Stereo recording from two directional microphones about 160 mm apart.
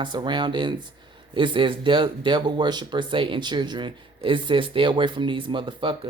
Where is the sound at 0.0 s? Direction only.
30° right (ahead or behind).